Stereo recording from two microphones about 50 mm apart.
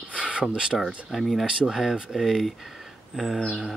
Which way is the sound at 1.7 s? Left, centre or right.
Centre.